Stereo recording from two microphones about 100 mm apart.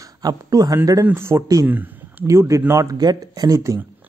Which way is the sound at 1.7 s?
15° right (ahead or behind).